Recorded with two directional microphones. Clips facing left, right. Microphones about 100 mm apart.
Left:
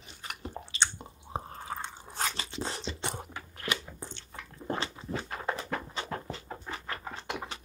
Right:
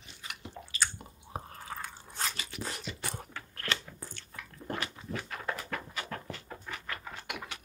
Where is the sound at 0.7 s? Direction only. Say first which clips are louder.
Left 2 dB; 25° left (ahead or behind).